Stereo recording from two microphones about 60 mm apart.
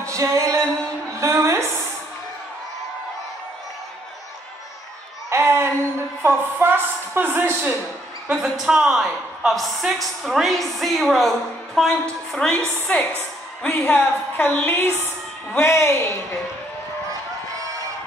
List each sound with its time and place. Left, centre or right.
0.0 s music: right
1.2 s a sound: right
5.3 s a sound: right
6.2 s a woman's voice: right
8.5 s a woman's voice: centre
13.7 s a woman's voice: left
15.5 s a woman's voice: left